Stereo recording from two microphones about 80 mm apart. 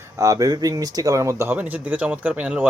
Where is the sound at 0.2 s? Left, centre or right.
Right.